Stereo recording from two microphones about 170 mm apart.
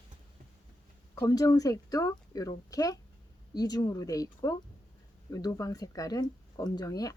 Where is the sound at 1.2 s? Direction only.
20° left (ahead or behind).